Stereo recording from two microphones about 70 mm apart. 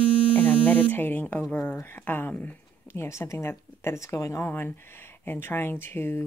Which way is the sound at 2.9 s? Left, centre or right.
Left.